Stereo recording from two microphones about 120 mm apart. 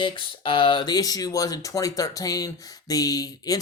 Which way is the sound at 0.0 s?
40° left (ahead or behind).